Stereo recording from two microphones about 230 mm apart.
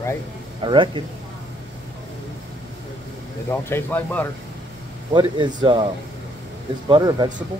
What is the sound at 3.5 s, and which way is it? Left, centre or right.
Speech, centre.